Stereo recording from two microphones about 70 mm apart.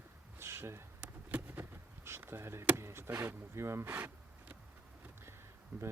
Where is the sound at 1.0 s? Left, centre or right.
Right.